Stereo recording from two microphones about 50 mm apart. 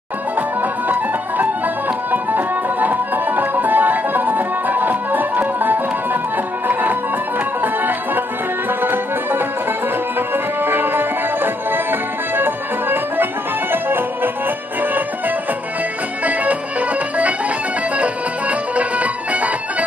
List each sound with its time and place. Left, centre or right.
0.4 s music: right
2.0 s music: right
17.9 s music: right